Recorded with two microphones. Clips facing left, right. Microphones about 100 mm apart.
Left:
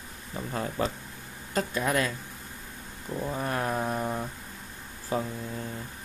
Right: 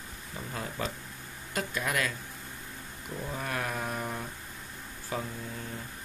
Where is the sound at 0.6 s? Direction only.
35° left (ahead or behind).